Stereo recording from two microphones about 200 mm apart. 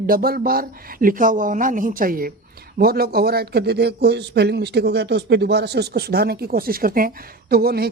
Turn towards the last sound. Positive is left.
turn(degrees=-50)  # may be behind; listen again after turning